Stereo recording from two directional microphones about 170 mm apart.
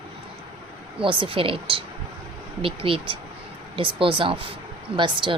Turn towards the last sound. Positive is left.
turn(degrees=-30)  # may be behind; listen again after turning